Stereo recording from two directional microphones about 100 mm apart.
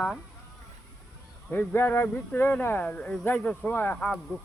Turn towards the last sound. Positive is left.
turn(degrees=10)  # may be behind; listen again after turning